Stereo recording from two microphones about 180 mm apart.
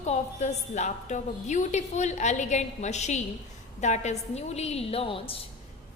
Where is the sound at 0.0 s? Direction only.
40° left (ahead or behind).